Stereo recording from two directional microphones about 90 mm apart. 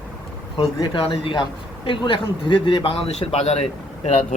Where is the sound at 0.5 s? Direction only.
80° left.